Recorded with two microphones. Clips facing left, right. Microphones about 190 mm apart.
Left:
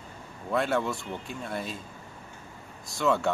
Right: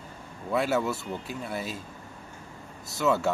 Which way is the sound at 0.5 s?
5° right (ahead or behind).